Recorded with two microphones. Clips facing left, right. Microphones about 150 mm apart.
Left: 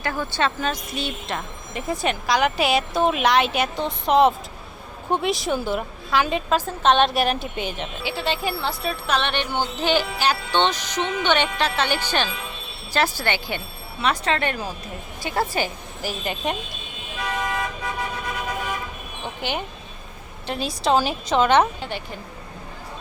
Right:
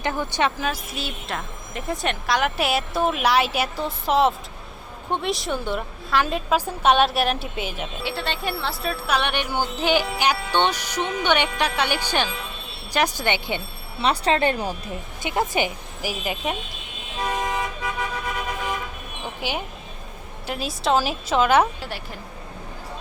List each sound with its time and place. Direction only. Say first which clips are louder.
0.0 s speech: right 1 dB; 15° right (ahead or behind); by 9.0 s centre (ahead or behind)
9.0 s speech: even; 10° right (ahead or behind)
14.0 s speech: right 2 dB; 30° right (ahead or behind)
15.2 s speech: right 1 dB; 20° right (ahead or behind)
19.4 s speech: left 1 dB; 5° right (ahead or behind)